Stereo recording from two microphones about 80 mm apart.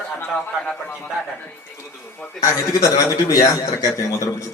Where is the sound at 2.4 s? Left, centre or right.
Left.